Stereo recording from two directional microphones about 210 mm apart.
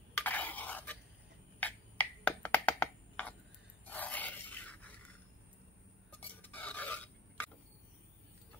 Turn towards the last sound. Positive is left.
turn(degrees=5)  # may be behind; listen again after turning